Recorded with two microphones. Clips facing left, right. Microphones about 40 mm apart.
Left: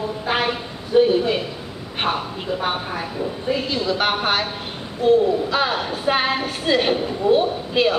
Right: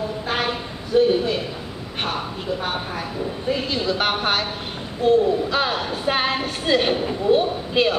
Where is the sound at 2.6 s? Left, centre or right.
Centre.